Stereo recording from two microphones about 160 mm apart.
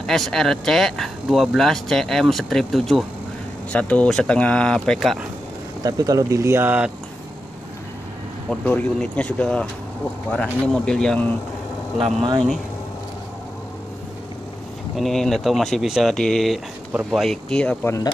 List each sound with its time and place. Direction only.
0.0 s speech: centre (ahead or behind)
5.9 s speech: 20° right (ahead or behind)
8.5 s speech: 5° left (ahead or behind)
15.0 s speech: centre (ahead or behind)